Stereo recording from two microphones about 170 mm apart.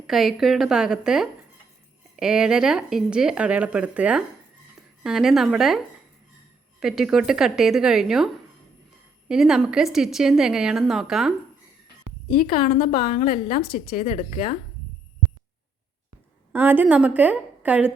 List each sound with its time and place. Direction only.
0.1 s speech: centre (ahead or behind)
9.3 s speech: 5° right (ahead or behind)
12.3 s a woman's voice: 60° left (ahead or behind)
16.5 s a woman's voice: 10° right (ahead or behind)